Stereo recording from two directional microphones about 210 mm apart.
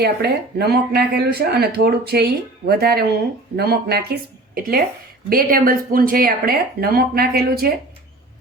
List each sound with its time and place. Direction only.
0.0 s speech: 50° right (ahead or behind)